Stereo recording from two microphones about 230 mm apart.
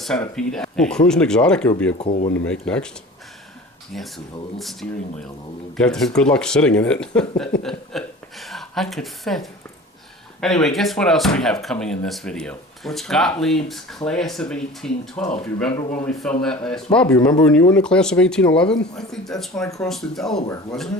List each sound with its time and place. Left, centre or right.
0.0 s speech: centre
2.0 s speech: left
2.5 s speech: centre
4.5 s a woman's voice: centre